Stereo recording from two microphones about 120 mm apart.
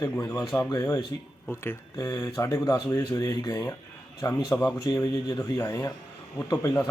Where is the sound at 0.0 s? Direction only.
25° left (ahead or behind).